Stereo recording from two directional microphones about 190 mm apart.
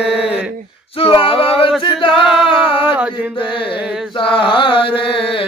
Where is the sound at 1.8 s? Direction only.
25° left (ahead or behind).